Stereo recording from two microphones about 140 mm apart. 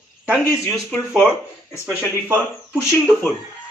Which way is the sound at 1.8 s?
15° right (ahead or behind).